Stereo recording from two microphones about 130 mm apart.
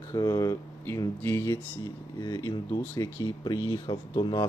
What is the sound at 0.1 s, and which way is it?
Speech, 30° left (ahead or behind).